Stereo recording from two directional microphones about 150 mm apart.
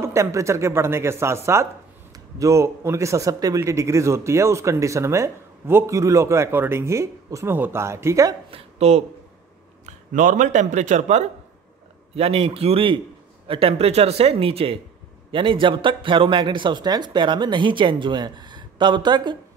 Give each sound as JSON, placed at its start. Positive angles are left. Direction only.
{"t": 0.0, "sound": "a man's voice", "side_deg": -20}
{"t": 8.5, "sound": "speech", "side_deg": -40}
{"t": 10.1, "sound": "a man's voice", "side_deg": -60}
{"t": 12.2, "sound": "speech", "side_deg": -40}